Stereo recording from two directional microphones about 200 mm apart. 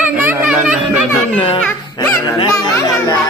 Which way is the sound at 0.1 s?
10° right (ahead or behind).